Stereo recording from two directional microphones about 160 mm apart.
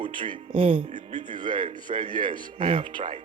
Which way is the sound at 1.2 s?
30° right (ahead or behind).